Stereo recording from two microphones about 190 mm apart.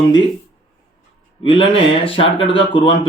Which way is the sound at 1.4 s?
30° left (ahead or behind).